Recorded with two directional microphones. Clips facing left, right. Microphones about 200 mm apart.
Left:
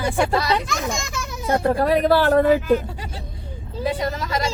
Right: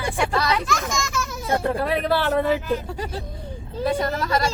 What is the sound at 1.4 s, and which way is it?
Speech, 40° left (ahead or behind).